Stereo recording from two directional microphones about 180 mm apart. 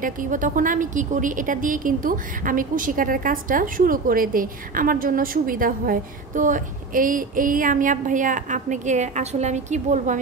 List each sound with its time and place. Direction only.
0.0 s a woman's voice: 45° right (ahead or behind)